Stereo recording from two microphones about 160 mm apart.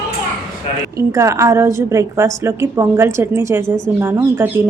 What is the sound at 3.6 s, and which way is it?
Speech, 5° left (ahead or behind).